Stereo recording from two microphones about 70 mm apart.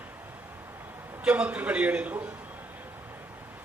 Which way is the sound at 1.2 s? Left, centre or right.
Centre.